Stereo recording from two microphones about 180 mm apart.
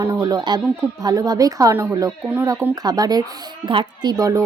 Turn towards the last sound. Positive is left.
turn(degrees=-20)  # may be behind; listen again after turning